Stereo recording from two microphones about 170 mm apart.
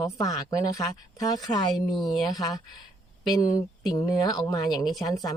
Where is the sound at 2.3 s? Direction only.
20° left (ahead or behind).